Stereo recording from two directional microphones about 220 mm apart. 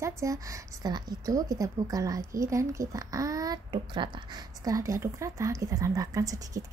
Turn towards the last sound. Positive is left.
turn(degrees=-15)  # may be behind; listen again after turning